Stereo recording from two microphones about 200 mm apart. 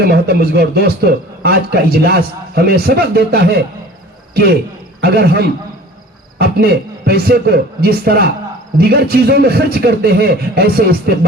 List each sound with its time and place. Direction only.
0.0 s a man's voice: 50° right (ahead or behind)